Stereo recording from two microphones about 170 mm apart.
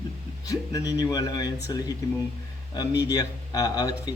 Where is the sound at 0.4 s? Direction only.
20° left (ahead or behind).